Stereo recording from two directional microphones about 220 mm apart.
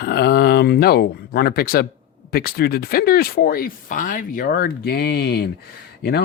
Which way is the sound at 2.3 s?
45° left (ahead or behind).